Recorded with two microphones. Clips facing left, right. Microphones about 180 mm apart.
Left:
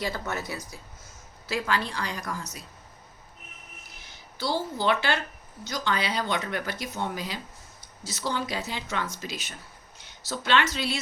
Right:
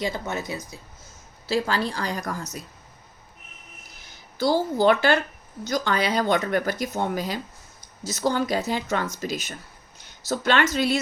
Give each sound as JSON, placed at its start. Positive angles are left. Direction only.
{"t": 0.0, "sound": "speech", "side_deg": -20}
{"t": 1.5, "sound": "speech", "side_deg": -35}
{"t": 4.4, "sound": "speech", "side_deg": -45}